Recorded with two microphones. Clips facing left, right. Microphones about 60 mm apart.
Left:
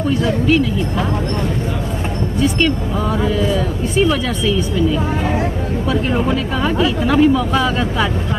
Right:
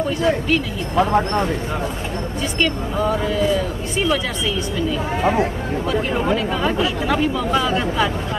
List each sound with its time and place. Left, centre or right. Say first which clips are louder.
0.1 s speech: left 5 dB; centre
2.4 s speech: left 5 dB; centre
6.2 s speech: left 1 dB; centre